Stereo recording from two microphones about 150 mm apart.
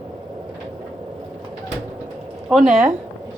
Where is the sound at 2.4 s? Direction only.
Centre (ahead or behind).